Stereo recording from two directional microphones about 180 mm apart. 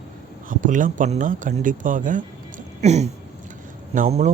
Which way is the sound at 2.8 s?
40° right (ahead or behind).